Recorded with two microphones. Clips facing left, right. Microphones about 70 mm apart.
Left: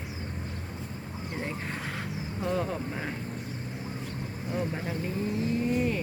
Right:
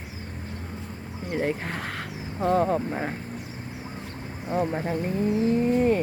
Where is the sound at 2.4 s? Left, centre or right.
Right.